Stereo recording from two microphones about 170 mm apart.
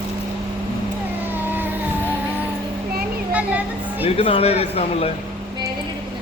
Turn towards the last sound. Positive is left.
turn(degrees=35)  # may be behind; listen again after turning